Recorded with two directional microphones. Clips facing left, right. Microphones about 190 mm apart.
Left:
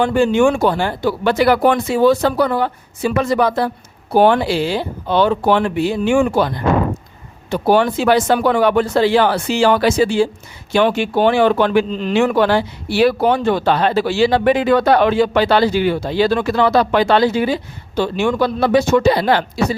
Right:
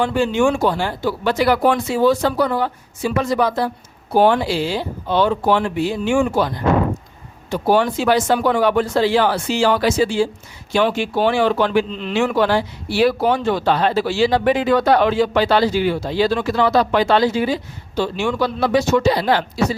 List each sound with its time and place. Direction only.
0.0 s speech: 50° left (ahead or behind)
7.5 s speech: 65° left (ahead or behind)
11.9 s speech: 40° left (ahead or behind)
12.1 s speech: 55° left (ahead or behind)